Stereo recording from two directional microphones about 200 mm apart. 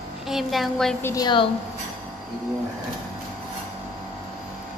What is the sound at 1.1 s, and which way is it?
Speech, 20° left (ahead or behind).